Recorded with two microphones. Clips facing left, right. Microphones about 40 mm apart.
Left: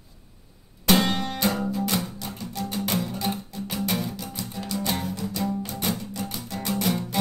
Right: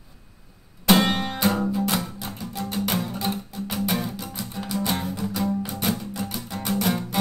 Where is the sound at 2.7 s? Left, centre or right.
Centre.